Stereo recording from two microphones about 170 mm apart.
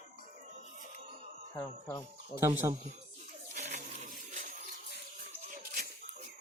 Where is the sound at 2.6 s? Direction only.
20° right (ahead or behind).